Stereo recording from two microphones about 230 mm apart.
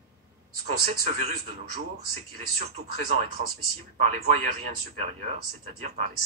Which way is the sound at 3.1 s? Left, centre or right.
Right.